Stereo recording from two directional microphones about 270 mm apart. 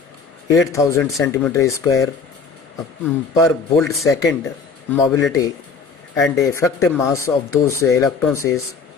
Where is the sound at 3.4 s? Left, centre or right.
Centre.